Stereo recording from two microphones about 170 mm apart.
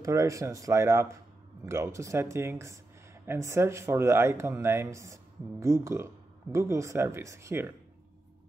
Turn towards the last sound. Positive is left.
turn(degrees=-15)  # may be behind; listen again after turning